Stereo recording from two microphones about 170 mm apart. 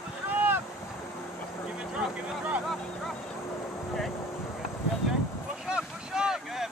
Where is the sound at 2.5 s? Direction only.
Centre (ahead or behind).